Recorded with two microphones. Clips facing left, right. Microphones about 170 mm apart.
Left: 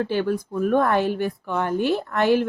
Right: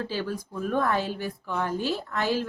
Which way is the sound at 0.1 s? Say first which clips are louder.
Left 8 dB; 55° left (ahead or behind).